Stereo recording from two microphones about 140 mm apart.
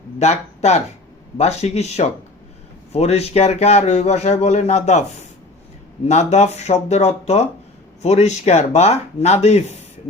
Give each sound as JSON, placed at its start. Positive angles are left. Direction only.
{"t": 0.2, "sound": "speech", "side_deg": 50}
{"t": 6.1, "sound": "speech", "side_deg": 55}